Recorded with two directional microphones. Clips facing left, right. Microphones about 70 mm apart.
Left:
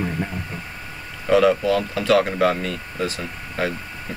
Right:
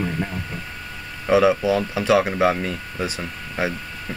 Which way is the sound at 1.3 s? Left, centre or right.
Centre.